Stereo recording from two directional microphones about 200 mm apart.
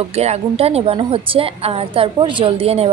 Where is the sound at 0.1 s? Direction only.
30° right (ahead or behind).